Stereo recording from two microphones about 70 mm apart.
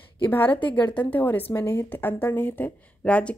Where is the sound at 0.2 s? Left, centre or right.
Left.